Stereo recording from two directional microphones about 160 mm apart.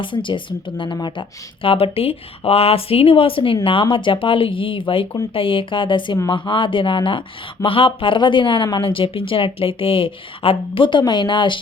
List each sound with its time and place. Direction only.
0.0 s speech: 30° left (ahead or behind)